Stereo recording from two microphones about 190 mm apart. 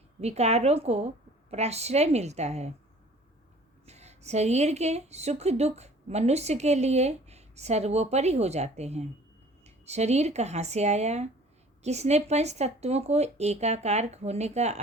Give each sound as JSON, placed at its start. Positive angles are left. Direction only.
{"t": 0.2, "sound": "a woman's voice", "side_deg": -35}
{"t": 3.8, "sound": "a woman's voice", "side_deg": -35}